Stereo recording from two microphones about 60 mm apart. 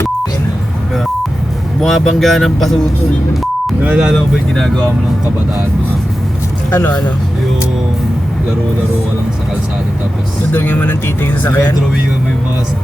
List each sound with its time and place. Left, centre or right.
1.8 s speech: centre
3.8 s speech: centre
4.5 s speech: centre
6.7 s speech: left
10.5 s speech: left